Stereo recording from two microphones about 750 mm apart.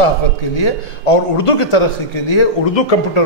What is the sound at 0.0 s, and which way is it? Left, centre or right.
A man's voice, left.